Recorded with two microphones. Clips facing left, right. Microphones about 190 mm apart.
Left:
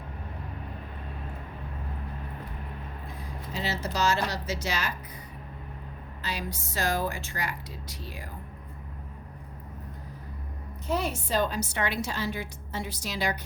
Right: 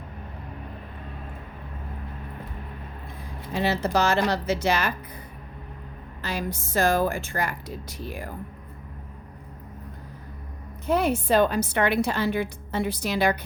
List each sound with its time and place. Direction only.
3.5 s a woman's voice: 60° right (ahead or behind)
6.2 s a woman's voice: 50° right (ahead or behind)
10.8 s a woman's voice: 55° right (ahead or behind)